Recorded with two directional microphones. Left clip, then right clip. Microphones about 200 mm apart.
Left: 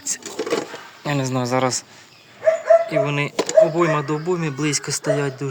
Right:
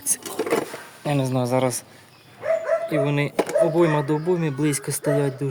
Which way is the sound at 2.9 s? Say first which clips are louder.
Left 2 dB; 5° right (ahead or behind).